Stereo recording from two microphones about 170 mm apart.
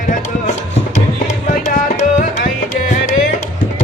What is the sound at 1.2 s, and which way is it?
Music, 45° left (ahead or behind).